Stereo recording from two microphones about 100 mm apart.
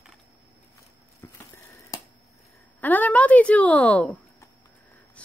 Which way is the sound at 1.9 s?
35° left (ahead or behind).